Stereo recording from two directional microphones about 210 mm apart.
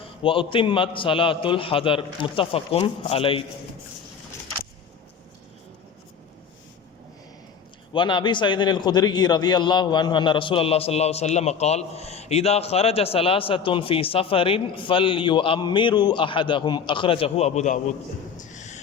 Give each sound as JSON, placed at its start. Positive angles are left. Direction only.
{"t": 0.0, "sound": "a man's voice", "side_deg": 25}
{"t": 7.9, "sound": "a man's voice", "side_deg": 25}
{"t": 18.3, "sound": "a sound", "side_deg": 35}